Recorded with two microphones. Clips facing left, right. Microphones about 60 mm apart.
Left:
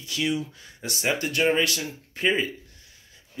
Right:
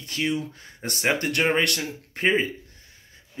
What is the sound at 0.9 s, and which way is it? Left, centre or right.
Speech, right.